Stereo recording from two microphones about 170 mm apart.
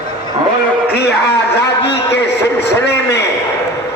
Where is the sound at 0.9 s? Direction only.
75° left (ahead or behind).